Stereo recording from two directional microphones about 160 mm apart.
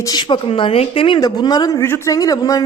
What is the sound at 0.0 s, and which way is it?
A woman's voice, 25° left (ahead or behind).